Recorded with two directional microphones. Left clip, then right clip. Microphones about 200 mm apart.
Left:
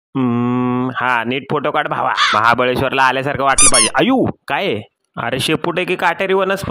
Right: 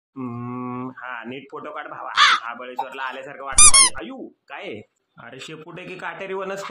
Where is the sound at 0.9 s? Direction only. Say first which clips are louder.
Left 16 dB; 50° left (ahead or behind).